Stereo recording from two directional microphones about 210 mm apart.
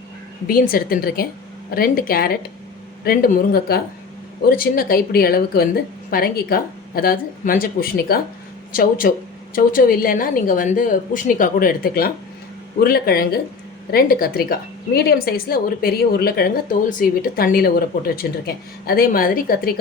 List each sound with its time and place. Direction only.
0.4 s a woman's voice: 45° left (ahead or behind)